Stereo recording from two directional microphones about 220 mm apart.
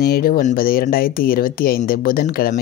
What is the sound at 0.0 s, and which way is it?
Speech, 45° left (ahead or behind).